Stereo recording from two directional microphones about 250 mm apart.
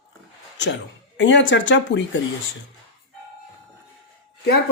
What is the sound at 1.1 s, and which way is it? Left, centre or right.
Speech, left.